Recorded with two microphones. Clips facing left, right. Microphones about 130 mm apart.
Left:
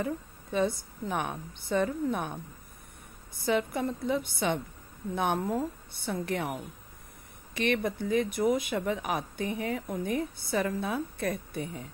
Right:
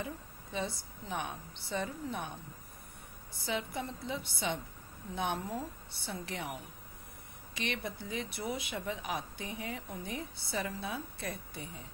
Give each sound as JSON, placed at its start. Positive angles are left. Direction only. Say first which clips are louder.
{"t": 0.0, "sound": "speech", "louder": "left 8 dB", "side_deg": 55}
{"t": 3.4, "sound": "speech", "louder": "left 9 dB", "side_deg": 50}